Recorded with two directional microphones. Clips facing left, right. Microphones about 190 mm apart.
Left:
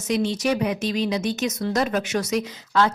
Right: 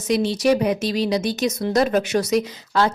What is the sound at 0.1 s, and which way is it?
Speech, 35° right (ahead or behind).